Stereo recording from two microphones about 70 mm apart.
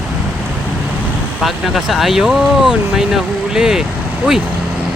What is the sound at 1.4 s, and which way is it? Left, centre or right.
Speech, centre.